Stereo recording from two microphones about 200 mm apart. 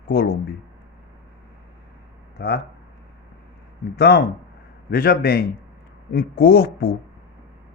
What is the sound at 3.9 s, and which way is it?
A man's voice, 55° left (ahead or behind).